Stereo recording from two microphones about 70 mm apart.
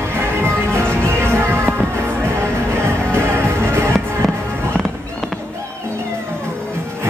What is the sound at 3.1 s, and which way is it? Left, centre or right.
Music, right.